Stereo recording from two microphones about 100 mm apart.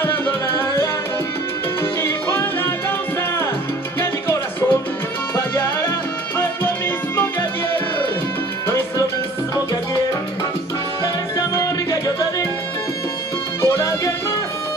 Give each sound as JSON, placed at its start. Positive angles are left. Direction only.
{"t": 0.0, "sound": "music", "side_deg": 20}
{"t": 1.8, "sound": "salsa music", "side_deg": 25}
{"t": 4.0, "sound": "music", "side_deg": 20}
{"t": 8.6, "sound": "music", "side_deg": 25}
{"t": 11.3, "sound": "music", "side_deg": 35}
{"t": 13.6, "sound": "music", "side_deg": 30}